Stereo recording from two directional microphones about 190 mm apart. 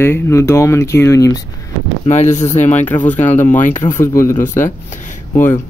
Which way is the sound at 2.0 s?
35° left (ahead or behind).